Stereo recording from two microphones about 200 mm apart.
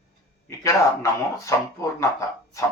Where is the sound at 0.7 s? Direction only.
15° left (ahead or behind).